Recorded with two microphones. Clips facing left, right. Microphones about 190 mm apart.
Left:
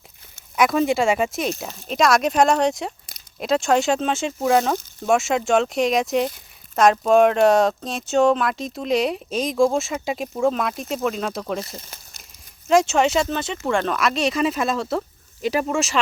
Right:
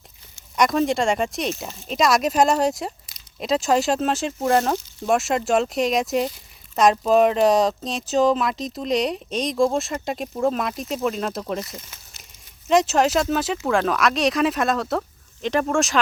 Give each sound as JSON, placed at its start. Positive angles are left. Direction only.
{"t": 0.5, "sound": "speech", "side_deg": 5}
{"t": 11.6, "sound": "speech", "side_deg": 30}
{"t": 12.6, "sound": "speech", "side_deg": 0}